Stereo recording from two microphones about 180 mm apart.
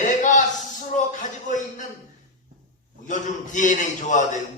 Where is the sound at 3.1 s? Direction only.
45° left (ahead or behind).